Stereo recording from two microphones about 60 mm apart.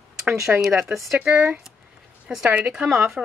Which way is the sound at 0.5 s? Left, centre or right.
Centre.